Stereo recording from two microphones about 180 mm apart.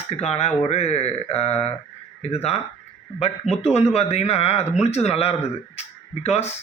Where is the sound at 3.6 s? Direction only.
35° left (ahead or behind).